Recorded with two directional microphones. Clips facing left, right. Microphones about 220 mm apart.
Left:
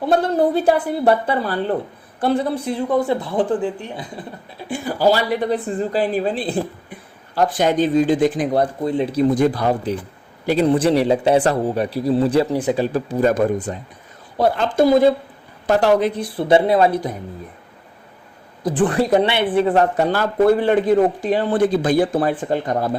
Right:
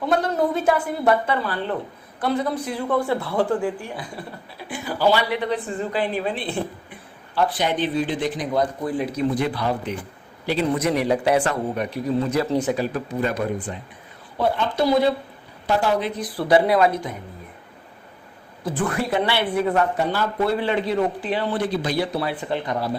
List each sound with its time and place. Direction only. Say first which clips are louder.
0.0 s a woman's voice: left 4 dB; 30° left (ahead or behind)
2.8 s speech: left 3 dB; 15° left (ahead or behind)
4.9 s a woman's voice: left 3 dB; 40° left (ahead or behind)
8.8 s speech: left 5 dB; 25° left (ahead or behind)
9.3 s a man's voice: left 6 dB; 45° left (ahead or behind)
10.7 s a woman's voice: left 5 dB; 30° left (ahead or behind)
13.2 s a man's voice: left 9 dB; 45° left (ahead or behind)
14.8 s a man's voice: left 6 dB; 50° left (ahead or behind)
16.1 s speech: left 3 dB; 25° left (ahead or behind)
18.6 s a woman's voice: left 7 dB; 30° left (ahead or behind)
19.2 s speech: left 4 dB; 20° left (ahead or behind)
19.5 s a woman's voice: left 5 dB; 35° left (ahead or behind)
20.0 s a man's voice: left 6 dB; 45° left (ahead or behind)